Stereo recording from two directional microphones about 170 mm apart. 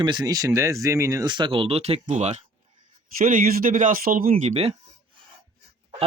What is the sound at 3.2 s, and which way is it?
Speech, 55° right (ahead or behind).